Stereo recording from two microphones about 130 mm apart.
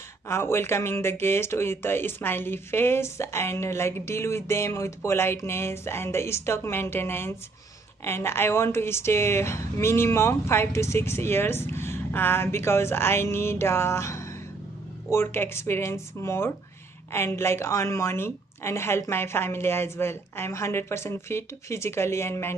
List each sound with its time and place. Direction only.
0.3 s speech: 20° left (ahead or behind)